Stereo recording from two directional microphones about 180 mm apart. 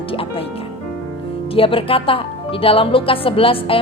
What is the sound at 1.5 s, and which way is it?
Speech, 30° left (ahead or behind).